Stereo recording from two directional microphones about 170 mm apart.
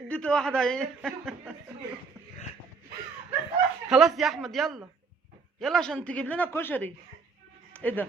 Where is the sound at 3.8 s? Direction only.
5° right (ahead or behind).